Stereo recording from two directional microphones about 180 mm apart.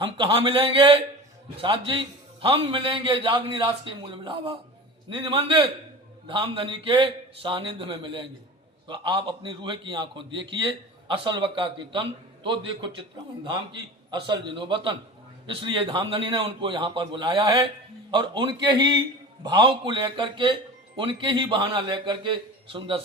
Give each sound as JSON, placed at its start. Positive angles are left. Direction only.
{"t": 0.0, "sound": "a man's voice", "side_deg": -30}
{"t": 14.1, "sound": "a man's voice", "side_deg": -25}